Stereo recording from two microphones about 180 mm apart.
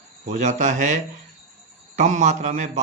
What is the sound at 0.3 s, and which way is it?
Speech, 40° right (ahead or behind).